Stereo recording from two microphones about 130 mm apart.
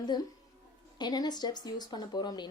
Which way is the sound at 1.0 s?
35° left (ahead or behind).